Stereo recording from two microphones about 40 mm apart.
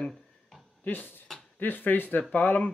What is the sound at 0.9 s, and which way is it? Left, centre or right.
Speech, left.